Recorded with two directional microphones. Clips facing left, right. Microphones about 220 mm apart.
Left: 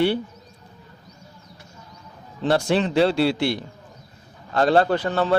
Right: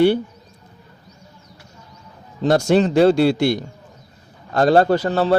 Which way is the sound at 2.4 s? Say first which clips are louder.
Right 5 dB; 45° right (ahead or behind).